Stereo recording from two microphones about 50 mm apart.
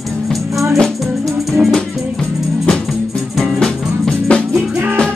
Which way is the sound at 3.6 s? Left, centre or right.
Centre.